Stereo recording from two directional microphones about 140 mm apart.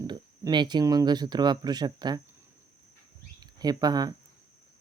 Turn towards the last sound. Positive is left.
turn(degrees=-30)  # may be behind; listen again after turning